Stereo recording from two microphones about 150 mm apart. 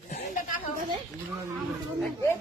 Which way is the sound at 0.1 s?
60° left (ahead or behind).